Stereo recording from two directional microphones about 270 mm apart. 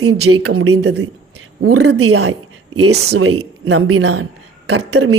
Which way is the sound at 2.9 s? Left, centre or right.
Right.